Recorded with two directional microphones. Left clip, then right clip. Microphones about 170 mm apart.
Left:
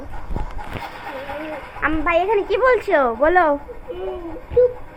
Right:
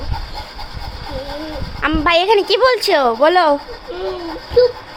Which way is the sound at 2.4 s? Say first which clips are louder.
Right 3 dB; 40° right (ahead or behind).